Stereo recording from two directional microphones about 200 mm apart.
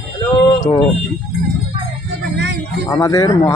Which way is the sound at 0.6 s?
25° left (ahead or behind).